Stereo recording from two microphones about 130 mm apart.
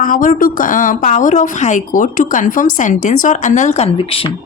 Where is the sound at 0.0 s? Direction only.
90° left; by 3.8 s 65° left (ahead or behind).